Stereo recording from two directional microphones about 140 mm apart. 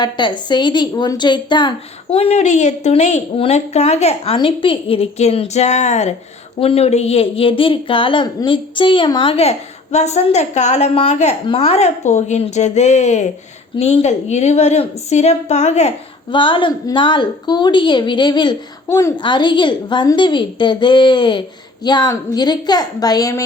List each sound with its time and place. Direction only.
0.0 s speech: 30° left (ahead or behind); by 15.9 s 55° left (ahead or behind)
16.3 s a woman's voice: 35° left (ahead or behind)
18.9 s a woman's voice: 20° left (ahead or behind)
19.1 s a woman's voice: 35° left (ahead or behind)